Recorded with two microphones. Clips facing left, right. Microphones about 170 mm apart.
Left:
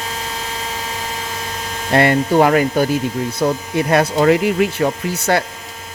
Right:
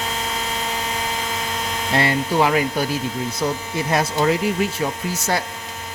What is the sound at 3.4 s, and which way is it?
Speech, 60° left (ahead or behind).